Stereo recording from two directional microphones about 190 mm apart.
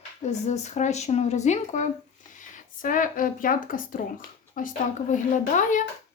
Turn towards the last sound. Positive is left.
turn(degrees=40)  # may be behind; listen again after turning